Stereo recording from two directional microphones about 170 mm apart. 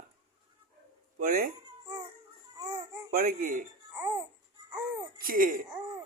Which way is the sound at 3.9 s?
20° right (ahead or behind).